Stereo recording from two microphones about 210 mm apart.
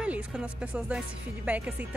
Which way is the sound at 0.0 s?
5° right (ahead or behind).